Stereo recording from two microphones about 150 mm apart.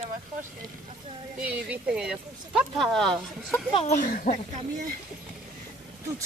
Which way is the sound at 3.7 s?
50° left (ahead or behind).